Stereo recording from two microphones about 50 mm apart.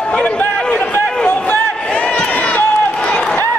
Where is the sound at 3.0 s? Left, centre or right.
Centre.